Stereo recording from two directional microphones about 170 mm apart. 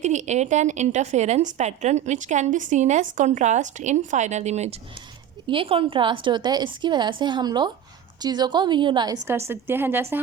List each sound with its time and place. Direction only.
0.0 s a woman's voice: 45° right (ahead or behind); by 10.2 s 10° right (ahead or behind)